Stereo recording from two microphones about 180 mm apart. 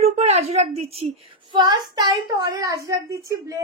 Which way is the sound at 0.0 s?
35° right (ahead or behind).